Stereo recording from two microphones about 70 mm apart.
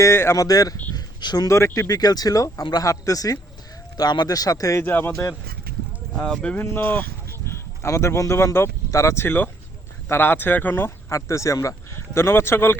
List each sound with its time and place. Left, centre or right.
0.0 s speech: left
0.3 s speech: left
0.9 s a sound: left
1.5 s speech: left
3.9 s speech: left
4.8 s speech: left
6.6 s speech: left
9.2 s speech: left